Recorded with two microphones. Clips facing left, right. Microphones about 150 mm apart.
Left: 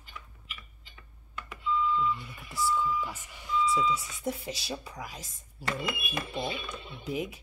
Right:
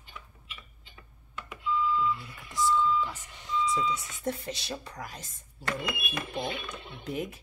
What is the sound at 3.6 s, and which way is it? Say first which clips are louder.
Speech: left 3 dB; 5° left (ahead or behind).